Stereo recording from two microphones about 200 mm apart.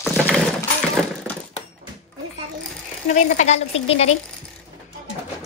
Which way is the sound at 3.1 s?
35° left (ahead or behind).